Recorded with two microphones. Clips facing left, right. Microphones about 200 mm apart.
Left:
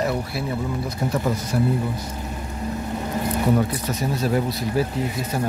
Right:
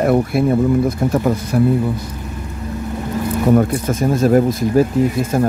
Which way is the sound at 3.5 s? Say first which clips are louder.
Right 9 dB; 50° right (ahead or behind).